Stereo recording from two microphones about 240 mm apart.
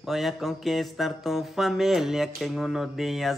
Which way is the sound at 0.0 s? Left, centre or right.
Centre.